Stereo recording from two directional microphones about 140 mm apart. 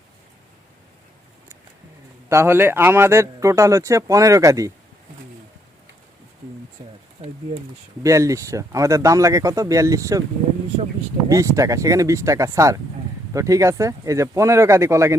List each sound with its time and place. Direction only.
2.3 s speech: 15° right (ahead or behind)
8.0 s speech: 20° right (ahead or behind)
11.3 s speech: 25° right (ahead or behind)